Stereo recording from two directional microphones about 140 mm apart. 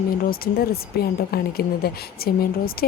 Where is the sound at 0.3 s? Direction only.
90° left.